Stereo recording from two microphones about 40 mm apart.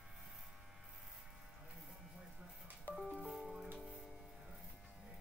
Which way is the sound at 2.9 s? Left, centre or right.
Left.